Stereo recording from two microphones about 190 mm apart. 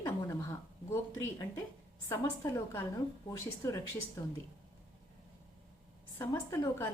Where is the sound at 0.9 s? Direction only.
15° left (ahead or behind).